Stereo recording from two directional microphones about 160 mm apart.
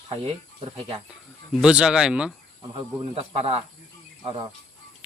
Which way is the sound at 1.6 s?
5° right (ahead or behind).